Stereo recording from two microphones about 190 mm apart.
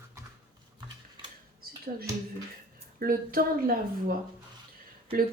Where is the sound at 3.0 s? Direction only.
50° right (ahead or behind).